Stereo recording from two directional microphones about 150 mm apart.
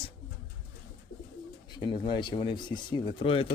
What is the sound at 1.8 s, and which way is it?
Speech, 30° left (ahead or behind).